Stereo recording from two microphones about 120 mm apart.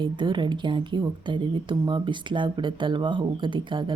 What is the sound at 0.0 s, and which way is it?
Speech, 40° right (ahead or behind).